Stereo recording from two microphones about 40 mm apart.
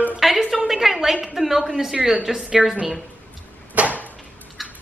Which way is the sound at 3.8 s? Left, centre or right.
Right.